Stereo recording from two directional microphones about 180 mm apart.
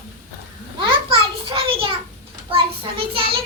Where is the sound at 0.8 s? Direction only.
30° right (ahead or behind).